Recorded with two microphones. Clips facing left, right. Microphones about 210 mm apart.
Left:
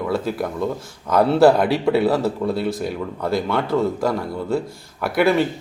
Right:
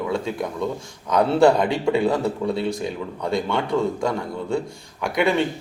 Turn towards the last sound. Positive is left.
turn(degrees=5)  # may be behind; listen again after turning